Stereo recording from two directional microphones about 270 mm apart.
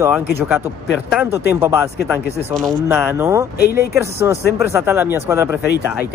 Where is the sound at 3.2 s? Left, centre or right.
Centre.